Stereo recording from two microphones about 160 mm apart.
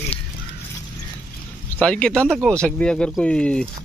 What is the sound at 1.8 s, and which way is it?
A man's voice, 5° left (ahead or behind).